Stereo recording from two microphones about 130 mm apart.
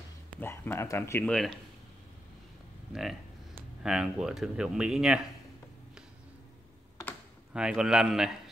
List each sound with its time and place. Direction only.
0.4 s speech: 15° left (ahead or behind)
1.2 s speech: 5° left (ahead or behind)
2.9 s speech: 5° right (ahead or behind)
7.5 s speech: 5° right (ahead or behind)